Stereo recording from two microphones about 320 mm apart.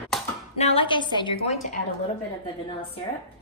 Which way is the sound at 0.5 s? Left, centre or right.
Centre.